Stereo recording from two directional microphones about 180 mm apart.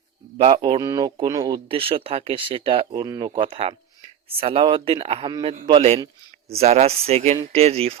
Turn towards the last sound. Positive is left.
turn(degrees=-35)  # may be behind; listen again after turning